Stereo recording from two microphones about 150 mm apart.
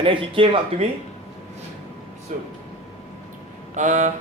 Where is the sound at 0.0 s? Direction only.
35° right (ahead or behind).